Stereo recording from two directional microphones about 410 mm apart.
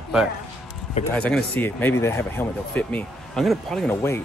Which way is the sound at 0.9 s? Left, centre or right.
Centre.